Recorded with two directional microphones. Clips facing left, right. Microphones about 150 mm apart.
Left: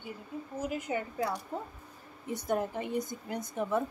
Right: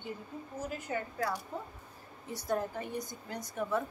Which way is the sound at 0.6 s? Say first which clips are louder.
Left 3 dB; 15° left (ahead or behind).